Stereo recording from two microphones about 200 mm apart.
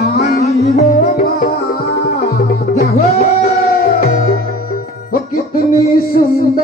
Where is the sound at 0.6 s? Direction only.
35° left (ahead or behind).